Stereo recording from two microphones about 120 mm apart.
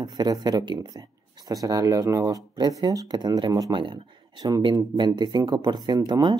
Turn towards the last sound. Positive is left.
turn(degrees=-35)  # may be behind; listen again after turning